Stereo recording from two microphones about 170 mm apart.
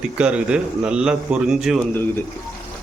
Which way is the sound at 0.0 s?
5° right (ahead or behind).